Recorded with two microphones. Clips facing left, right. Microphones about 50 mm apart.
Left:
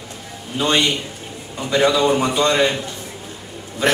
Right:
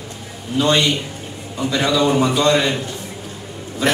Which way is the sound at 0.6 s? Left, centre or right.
Centre.